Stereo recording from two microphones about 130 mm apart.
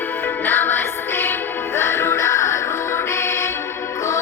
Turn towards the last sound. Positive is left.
turn(degrees=20)  # may be behind; listen again after turning